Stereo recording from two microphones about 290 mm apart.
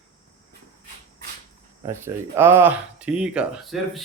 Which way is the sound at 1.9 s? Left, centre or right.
Centre.